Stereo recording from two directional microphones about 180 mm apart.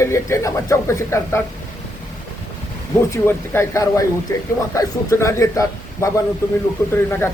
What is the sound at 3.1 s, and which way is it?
Speech, 15° left (ahead or behind).